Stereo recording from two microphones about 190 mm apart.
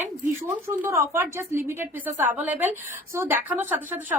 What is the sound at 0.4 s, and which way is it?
Speech, 15° right (ahead or behind).